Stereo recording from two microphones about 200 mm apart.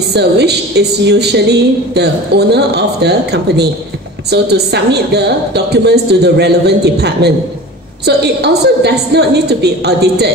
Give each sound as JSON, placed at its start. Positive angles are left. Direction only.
{"t": 0.1, "sound": "a woman's voice", "side_deg": -55}